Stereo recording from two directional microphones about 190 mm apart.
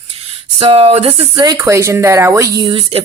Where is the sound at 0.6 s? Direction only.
30° right (ahead or behind).